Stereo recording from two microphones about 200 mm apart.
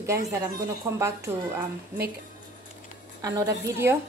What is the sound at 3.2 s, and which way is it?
Speech, 15° right (ahead or behind).